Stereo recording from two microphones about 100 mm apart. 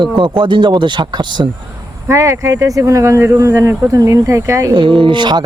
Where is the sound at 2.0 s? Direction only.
30° right (ahead or behind).